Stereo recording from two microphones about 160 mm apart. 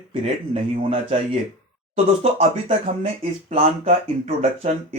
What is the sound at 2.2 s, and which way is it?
Speech, 40° right (ahead or behind).